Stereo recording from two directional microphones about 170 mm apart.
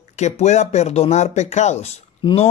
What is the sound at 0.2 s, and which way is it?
Speech, 40° left (ahead or behind).